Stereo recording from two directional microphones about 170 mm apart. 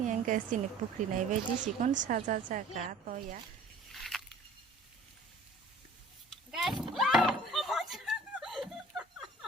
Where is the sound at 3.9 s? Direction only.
Centre (ahead or behind).